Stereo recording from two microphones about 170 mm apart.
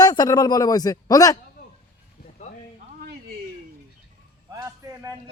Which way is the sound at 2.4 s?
45° left (ahead or behind).